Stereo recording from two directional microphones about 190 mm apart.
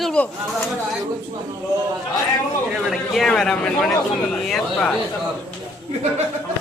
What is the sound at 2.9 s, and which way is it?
A man's voice, centre (ahead or behind).